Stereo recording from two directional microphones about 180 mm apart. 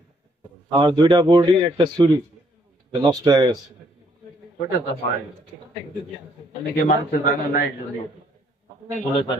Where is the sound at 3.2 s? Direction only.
20° right (ahead or behind).